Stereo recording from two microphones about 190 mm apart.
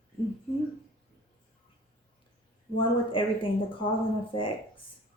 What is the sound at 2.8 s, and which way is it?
Speech, 25° left (ahead or behind).